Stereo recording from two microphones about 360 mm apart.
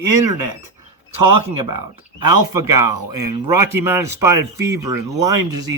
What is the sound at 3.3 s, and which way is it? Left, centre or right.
Speech, centre.